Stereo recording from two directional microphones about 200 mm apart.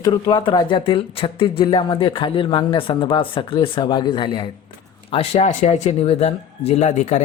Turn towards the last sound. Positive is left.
turn(degrees=35)  # may be behind; listen again after turning